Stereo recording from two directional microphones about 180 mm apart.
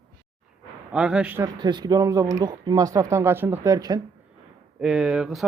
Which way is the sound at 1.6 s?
25° right (ahead or behind).